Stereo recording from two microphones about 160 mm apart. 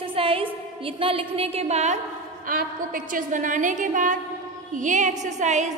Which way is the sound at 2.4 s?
60° right (ahead or behind).